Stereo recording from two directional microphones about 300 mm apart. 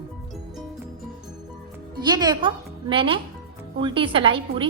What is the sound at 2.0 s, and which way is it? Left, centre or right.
A woman's voice, centre.